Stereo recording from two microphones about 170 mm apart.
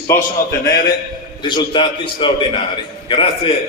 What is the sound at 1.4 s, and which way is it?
A man's voice, 25° left (ahead or behind).